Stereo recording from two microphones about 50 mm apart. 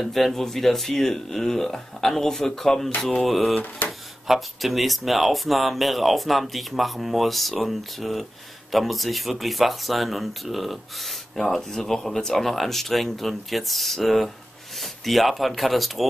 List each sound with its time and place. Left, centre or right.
0.0 s speech: centre
3.8 s speech: left
4.3 s speech: centre